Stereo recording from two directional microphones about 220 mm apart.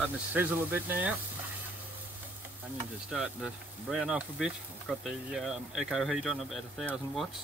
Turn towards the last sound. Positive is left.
turn(degrees=0)  # may be behind; listen again after turning